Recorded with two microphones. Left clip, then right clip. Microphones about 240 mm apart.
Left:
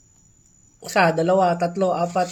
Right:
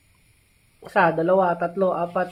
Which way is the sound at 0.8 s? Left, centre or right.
Centre.